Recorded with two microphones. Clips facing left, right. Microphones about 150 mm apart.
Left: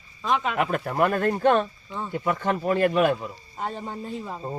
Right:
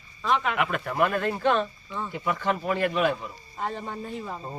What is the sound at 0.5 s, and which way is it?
A man's voice, 35° left (ahead or behind).